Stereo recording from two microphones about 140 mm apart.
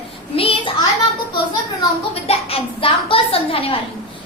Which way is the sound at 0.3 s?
40° left (ahead or behind).